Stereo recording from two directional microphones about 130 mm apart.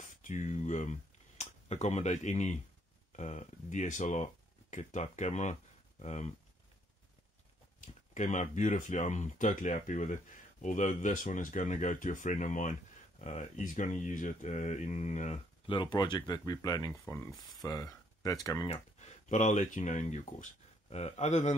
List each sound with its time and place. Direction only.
0.0 s speech: 75° left (ahead or behind)
7.8 s speech: 70° left (ahead or behind)
15.6 s speech: 40° left (ahead or behind)
17.3 s speech: centre (ahead or behind)
17.6 s speech: 25° left (ahead or behind)
18.7 s speech: 65° left (ahead or behind)